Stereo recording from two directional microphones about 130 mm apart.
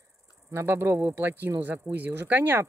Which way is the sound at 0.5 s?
20° right (ahead or behind).